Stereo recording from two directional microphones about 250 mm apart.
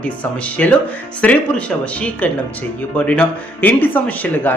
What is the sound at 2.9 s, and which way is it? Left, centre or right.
Speech, centre.